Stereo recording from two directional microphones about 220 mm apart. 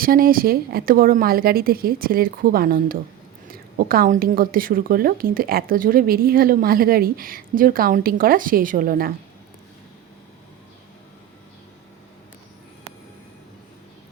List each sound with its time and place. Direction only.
0.0 s a woman's voice: 40° right (ahead or behind)